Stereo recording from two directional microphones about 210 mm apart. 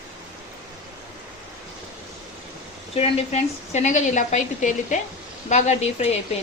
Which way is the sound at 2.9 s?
30° left (ahead or behind).